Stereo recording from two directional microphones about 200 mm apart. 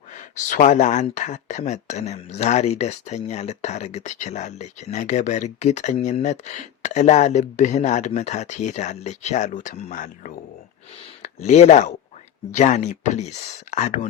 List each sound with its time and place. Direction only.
0.1 s speech: 40° left (ahead or behind)